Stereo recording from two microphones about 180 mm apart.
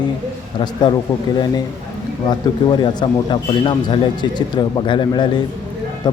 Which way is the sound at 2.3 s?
25° left (ahead or behind).